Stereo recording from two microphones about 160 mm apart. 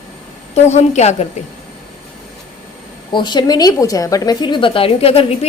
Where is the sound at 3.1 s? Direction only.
30° left (ahead or behind).